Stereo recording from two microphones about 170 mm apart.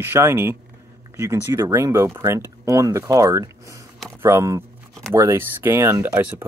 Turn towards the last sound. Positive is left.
turn(degrees=-10)  # may be behind; listen again after turning